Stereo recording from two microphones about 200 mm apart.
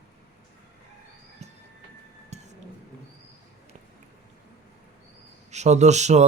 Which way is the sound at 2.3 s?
35° right (ahead or behind).